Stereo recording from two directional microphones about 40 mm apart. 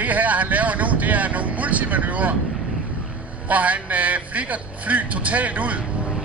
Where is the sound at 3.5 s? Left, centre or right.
Right.